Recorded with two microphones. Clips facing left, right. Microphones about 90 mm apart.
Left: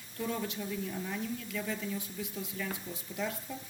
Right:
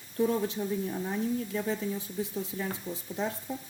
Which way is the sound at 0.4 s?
30° right (ahead or behind).